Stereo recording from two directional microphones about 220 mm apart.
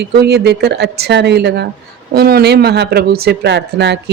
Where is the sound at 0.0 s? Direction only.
45° right (ahead or behind).